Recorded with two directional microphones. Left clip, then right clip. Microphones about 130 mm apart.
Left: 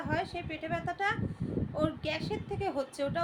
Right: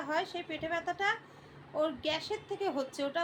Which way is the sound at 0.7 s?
5° right (ahead or behind).